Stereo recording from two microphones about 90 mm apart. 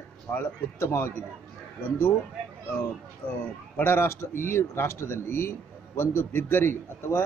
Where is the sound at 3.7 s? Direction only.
25° left (ahead or behind).